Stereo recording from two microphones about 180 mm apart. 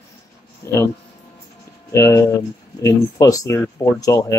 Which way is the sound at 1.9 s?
15° left (ahead or behind).